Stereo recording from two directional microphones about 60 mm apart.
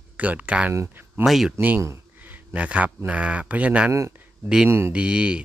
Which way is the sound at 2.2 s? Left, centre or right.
Right.